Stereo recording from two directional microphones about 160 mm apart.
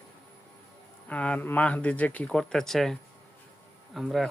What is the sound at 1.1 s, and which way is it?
Speech, 10° left (ahead or behind).